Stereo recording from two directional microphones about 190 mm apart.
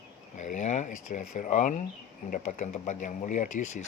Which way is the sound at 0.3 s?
40° left (ahead or behind).